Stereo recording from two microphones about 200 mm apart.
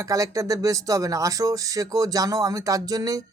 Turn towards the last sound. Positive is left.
turn(degrees=-15)  # may be behind; listen again after turning